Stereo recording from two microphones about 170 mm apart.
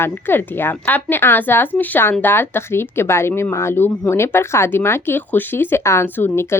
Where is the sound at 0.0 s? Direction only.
15° left (ahead or behind).